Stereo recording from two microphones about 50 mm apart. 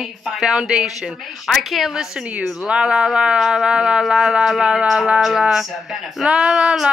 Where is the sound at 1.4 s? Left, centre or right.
Centre.